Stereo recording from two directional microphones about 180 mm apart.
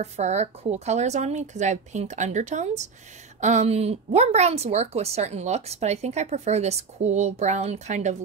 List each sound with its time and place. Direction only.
0.0 s a woman's voice: 40° right (ahead or behind)